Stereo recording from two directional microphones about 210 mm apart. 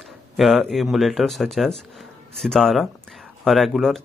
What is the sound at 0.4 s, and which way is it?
Speech, centre (ahead or behind).